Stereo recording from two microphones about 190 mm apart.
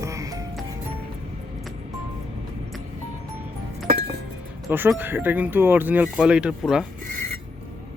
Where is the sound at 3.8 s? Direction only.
50° right (ahead or behind).